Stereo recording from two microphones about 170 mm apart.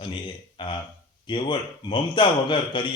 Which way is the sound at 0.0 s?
30° left (ahead or behind).